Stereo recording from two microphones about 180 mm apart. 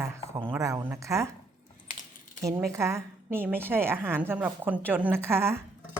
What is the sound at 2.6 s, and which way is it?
A woman's voice, 15° right (ahead or behind).